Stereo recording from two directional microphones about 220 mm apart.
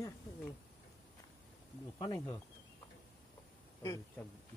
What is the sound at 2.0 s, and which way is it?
Speech, 15° left (ahead or behind).